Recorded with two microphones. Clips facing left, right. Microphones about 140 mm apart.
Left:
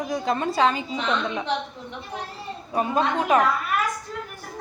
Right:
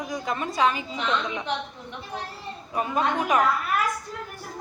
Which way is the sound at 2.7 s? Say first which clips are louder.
Left 2 dB; 30° left (ahead or behind).